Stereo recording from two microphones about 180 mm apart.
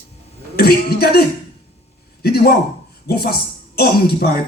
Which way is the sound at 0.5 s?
60° left (ahead or behind).